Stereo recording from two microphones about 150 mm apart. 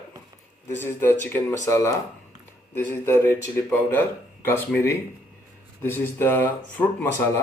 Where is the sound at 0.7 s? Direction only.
15° left (ahead or behind).